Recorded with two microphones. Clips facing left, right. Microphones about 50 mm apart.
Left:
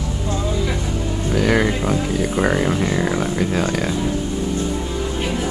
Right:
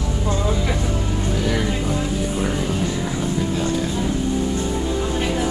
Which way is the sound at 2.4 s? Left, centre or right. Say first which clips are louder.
Left 7 dB; left.